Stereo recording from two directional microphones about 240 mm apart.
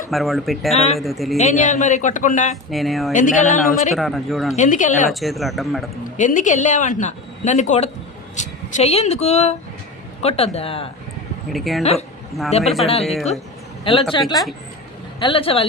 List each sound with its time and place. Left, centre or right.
0.1 s speech: centre
1.4 s speech: left
2.6 s speech: centre
3.1 s speech: left
3.9 s speech: centre
4.5 s speech: left
5.2 s speech: centre
6.1 s speech: left
11.5 s speech: centre
11.8 s speech: left